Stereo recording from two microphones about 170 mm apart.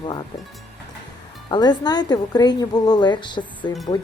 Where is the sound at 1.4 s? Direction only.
25° left (ahead or behind).